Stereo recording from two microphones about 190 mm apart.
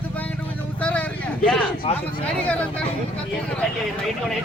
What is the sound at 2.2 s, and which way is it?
Speech, 5° left (ahead or behind).